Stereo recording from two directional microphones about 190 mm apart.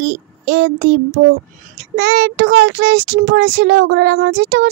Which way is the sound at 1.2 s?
90° right.